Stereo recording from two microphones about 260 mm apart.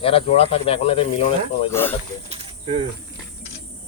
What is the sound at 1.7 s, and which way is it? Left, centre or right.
Speech, centre.